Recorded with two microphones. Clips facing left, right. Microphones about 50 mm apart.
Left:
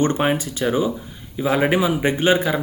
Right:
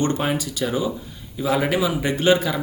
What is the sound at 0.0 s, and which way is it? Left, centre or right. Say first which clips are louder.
Speech: left 3 dB; left.